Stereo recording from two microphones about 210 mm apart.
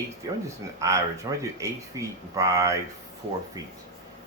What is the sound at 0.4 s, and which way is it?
Speech, 15° right (ahead or behind).